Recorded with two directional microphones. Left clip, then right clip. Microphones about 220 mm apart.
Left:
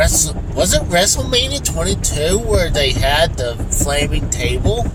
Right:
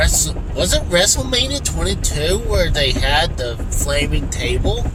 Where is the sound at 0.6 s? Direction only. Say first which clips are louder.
Left 1 dB; 10° left (ahead or behind).